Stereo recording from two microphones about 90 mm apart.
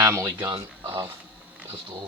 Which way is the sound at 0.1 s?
30° right (ahead or behind).